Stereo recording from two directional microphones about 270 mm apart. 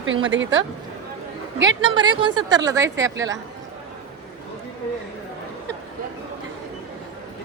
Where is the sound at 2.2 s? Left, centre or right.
Centre.